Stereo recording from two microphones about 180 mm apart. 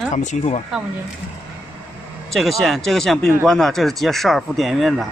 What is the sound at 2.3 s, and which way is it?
Speech, centre (ahead or behind).